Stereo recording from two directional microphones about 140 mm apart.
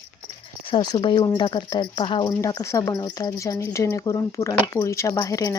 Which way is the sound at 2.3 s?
25° left (ahead or behind).